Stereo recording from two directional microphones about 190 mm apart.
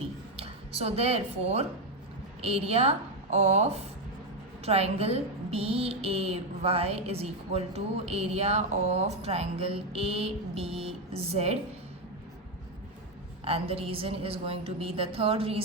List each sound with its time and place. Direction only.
0.3 s a woman's voice: 30° right (ahead or behind)
13.4 s a woman's voice: 30° right (ahead or behind)